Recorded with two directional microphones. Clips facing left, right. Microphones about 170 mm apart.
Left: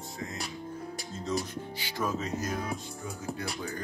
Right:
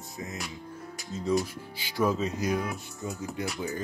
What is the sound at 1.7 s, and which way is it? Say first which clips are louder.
Speech: right 6 dB; 15° right (ahead or behind).